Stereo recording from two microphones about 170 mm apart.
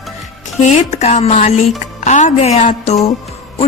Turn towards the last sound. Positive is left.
turn(degrees=40)  # may be behind; listen again after turning